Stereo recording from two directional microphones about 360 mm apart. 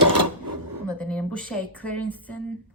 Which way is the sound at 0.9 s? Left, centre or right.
Centre.